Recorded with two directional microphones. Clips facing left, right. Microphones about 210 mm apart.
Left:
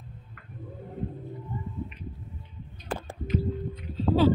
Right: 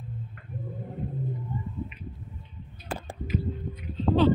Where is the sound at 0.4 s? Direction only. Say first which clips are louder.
Right 4 dB; 30° right (ahead or behind).